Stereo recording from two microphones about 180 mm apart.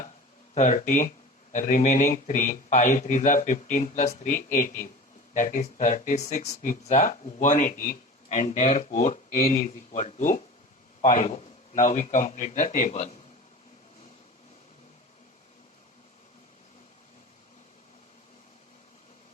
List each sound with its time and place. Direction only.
0.5 s speech: 40° left (ahead or behind)